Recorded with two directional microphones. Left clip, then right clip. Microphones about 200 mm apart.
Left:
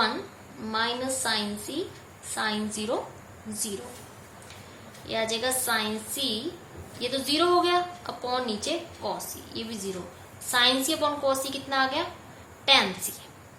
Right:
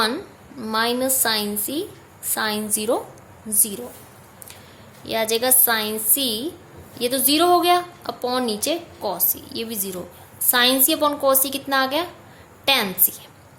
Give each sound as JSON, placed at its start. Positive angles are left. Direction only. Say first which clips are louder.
{"t": 0.6, "sound": "a woman's voice", "louder": "right 7 dB", "side_deg": -55}
{"t": 5.0, "sound": "a woman's voice", "louder": "right 7 dB", "side_deg": -55}